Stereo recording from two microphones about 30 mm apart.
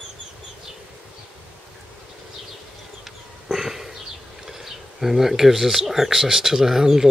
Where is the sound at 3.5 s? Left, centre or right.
Centre.